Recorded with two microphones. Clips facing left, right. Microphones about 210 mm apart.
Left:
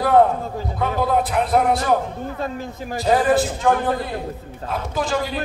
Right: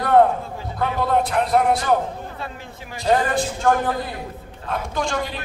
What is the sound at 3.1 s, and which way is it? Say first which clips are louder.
Speech: left 3 dB; 5° left (ahead or behind).